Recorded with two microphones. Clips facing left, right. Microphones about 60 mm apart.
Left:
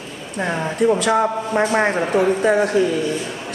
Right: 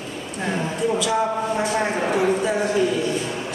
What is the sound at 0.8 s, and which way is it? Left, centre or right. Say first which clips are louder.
A woman's voice: left 6 dB; left.